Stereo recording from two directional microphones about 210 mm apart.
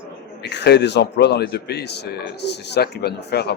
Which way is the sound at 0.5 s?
55° left (ahead or behind).